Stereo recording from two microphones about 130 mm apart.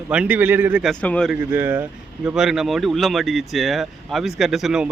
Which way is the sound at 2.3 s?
5° right (ahead or behind).